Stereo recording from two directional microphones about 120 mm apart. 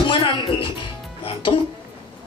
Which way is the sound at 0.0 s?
45° left (ahead or behind).